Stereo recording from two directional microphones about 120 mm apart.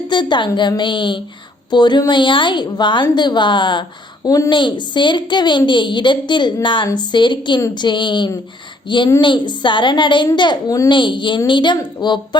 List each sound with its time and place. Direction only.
0.1 s a woman's voice: 40° left (ahead or behind)